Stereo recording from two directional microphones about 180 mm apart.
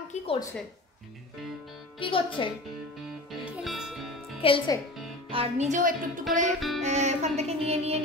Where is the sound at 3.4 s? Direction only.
Centre (ahead or behind).